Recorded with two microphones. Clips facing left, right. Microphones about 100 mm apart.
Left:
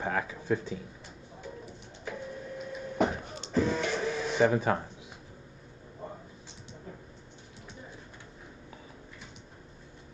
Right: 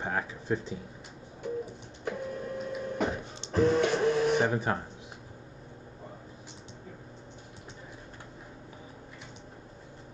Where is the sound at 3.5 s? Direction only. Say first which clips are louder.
Right 4 dB; 55° right (ahead or behind).